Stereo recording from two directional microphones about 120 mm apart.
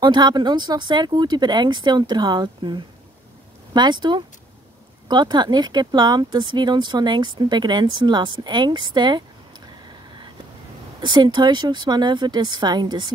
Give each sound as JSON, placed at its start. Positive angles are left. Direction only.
{"t": 0.0, "sound": "speech", "side_deg": -40}
{"t": 11.0, "sound": "speech", "side_deg": -40}